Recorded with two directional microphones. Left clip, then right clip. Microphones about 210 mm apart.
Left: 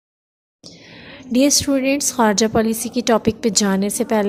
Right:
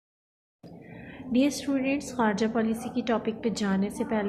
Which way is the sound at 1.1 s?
50° left (ahead or behind).